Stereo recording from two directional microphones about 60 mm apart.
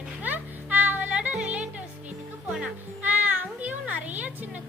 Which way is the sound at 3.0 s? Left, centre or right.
Right.